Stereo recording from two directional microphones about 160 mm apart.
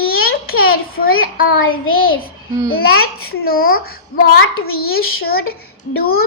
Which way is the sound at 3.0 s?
70° left (ahead or behind).